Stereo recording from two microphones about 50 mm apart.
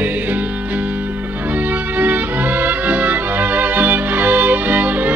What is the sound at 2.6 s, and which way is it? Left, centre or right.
Music, right.